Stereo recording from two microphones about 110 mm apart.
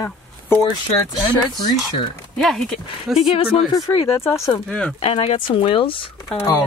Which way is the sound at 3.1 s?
55° left (ahead or behind).